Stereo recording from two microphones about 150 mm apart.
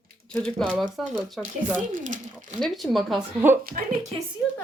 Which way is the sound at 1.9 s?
60° right (ahead or behind).